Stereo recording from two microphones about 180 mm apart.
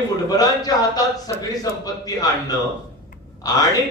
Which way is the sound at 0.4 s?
20° left (ahead or behind).